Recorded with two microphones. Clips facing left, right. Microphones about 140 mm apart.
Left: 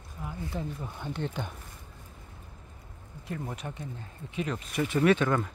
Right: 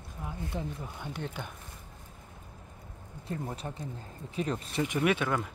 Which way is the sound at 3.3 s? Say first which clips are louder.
Even; 30° right (ahead or behind).